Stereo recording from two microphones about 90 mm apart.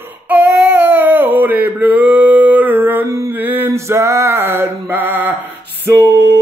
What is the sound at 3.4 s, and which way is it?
Music, 20° right (ahead or behind).